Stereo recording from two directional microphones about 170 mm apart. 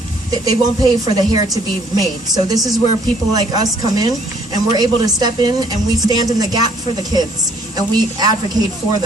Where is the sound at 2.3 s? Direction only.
25° right (ahead or behind).